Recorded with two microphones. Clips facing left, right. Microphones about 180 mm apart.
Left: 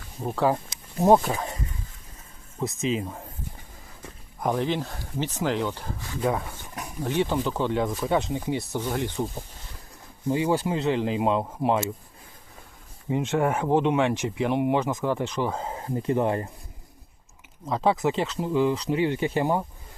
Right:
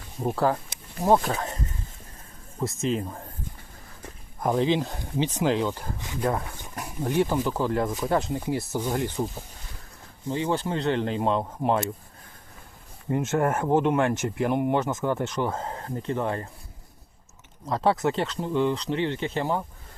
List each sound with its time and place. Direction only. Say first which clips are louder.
1.2 s speech: even; centre (ahead or behind)
2.6 s speech: even; centre (ahead or behind)
4.5 s speech: right 3 dB; 15° right (ahead or behind)
6.2 s speech: left 1 dB; centre (ahead or behind)
10.2 s speech: left 3 dB; 10° left (ahead or behind)
13.1 s speech: even; centre (ahead or behind)
15.7 s speech: left 4 dB; 10° left (ahead or behind)
17.7 s speech: even; centre (ahead or behind)